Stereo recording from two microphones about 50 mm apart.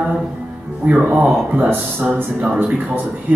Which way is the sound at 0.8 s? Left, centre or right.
Right.